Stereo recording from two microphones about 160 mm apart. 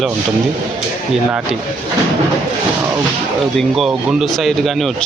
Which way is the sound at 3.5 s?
Centre (ahead or behind).